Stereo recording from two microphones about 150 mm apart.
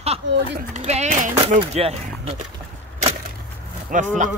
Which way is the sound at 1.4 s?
45° right (ahead or behind).